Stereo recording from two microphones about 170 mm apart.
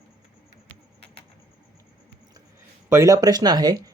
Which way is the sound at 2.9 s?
20° right (ahead or behind).